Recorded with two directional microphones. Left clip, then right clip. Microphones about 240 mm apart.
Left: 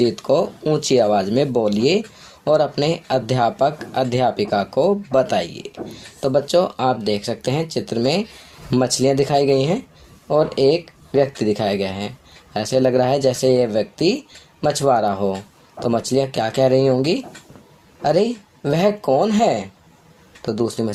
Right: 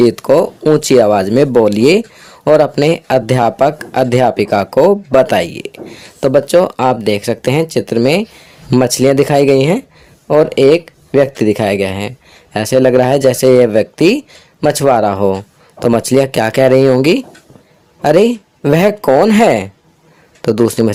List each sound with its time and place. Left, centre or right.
0.0 s speech: right